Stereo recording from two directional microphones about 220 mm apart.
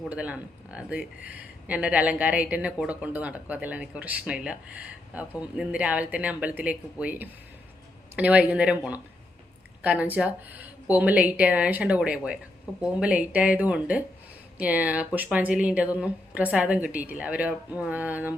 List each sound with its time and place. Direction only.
0.0 s speech: 5° right (ahead or behind)